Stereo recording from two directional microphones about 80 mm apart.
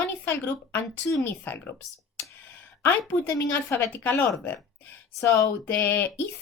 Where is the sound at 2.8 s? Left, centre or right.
Left.